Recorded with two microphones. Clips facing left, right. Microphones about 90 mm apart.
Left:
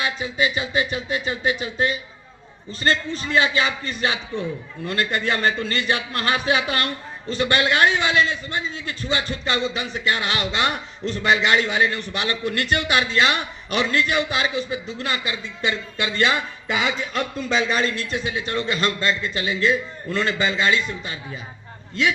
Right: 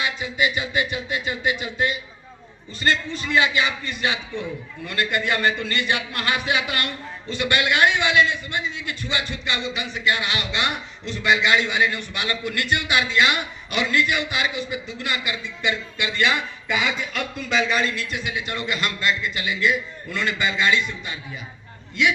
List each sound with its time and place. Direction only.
0.0 s a man's voice: 30° left (ahead or behind)